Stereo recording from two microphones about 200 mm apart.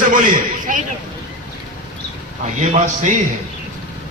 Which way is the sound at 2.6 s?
40° right (ahead or behind).